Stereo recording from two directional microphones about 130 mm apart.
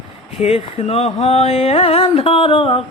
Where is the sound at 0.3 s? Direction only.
50° left (ahead or behind).